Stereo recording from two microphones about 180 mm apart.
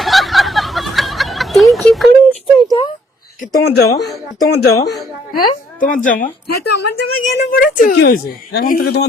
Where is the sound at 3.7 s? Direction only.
65° left (ahead or behind).